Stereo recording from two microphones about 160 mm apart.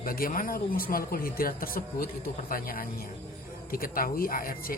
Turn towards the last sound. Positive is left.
turn(degrees=65)  # may be behind; listen again after turning